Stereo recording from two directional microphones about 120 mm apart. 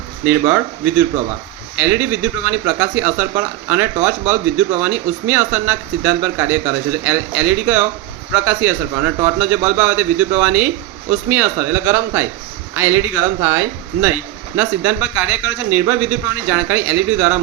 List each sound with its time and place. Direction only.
0.3 s a man's voice: 15° right (ahead or behind)